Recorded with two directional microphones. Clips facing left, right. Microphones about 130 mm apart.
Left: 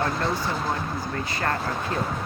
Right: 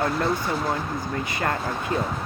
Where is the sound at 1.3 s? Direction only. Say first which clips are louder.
Right 1 dB; 20° right (ahead or behind).